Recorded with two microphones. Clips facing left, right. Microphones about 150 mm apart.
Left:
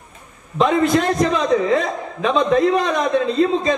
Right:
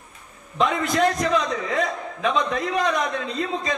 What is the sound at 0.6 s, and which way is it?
A man's voice, 25° left (ahead or behind).